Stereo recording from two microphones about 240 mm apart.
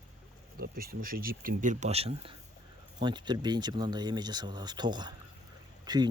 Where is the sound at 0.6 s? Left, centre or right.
Right.